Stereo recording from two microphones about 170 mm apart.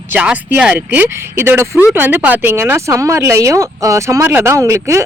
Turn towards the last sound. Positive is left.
turn(degrees=-15)  # may be behind; listen again after turning